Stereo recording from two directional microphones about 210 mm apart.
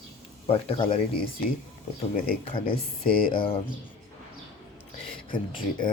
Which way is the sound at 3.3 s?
25° left (ahead or behind).